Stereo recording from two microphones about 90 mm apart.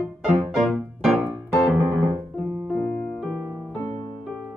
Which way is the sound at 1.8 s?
25° right (ahead or behind).